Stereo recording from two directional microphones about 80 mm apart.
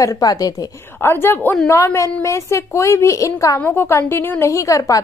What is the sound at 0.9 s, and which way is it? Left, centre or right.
Speech, left.